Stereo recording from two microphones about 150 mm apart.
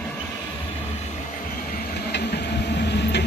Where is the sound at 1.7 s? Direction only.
90° left.